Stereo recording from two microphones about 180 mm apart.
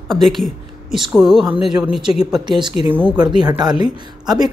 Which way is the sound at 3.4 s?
25° right (ahead or behind).